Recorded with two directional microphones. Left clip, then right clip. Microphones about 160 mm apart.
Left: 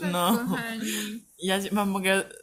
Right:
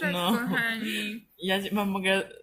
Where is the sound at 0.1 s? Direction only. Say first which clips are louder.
Left 2 dB; 20° left (ahead or behind).